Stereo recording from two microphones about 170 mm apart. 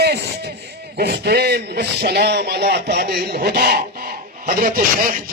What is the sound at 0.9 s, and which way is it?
Speech, 70° right (ahead or behind).